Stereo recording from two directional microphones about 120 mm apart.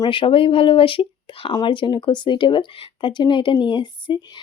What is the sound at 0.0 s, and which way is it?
Speech, 40° left (ahead or behind).